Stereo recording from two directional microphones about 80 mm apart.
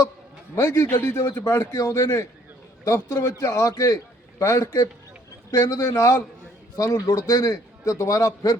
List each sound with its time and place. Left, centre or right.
0.5 s a man's voice: left
1.1 s a man's voice: left
1.4 s a man's voice: left